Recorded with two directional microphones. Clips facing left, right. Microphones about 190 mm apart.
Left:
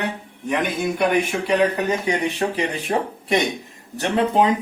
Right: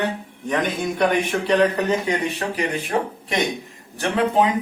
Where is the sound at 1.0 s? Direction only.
5° left (ahead or behind).